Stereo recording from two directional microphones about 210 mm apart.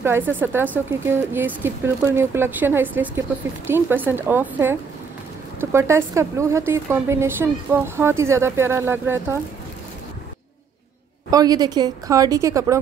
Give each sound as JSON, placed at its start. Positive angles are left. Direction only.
{"t": 0.0, "sound": "speech", "side_deg": -10}
{"t": 11.2, "sound": "speech", "side_deg": -15}